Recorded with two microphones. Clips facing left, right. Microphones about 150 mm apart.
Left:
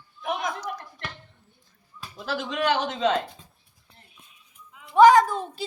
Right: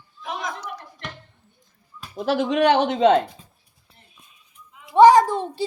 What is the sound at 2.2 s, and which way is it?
Speech, 55° right (ahead or behind).